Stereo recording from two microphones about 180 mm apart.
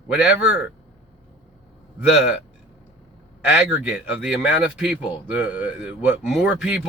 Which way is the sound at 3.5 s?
5° right (ahead or behind).